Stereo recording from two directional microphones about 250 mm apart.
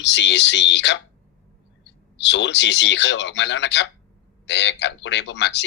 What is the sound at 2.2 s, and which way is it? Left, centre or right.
Speech, left.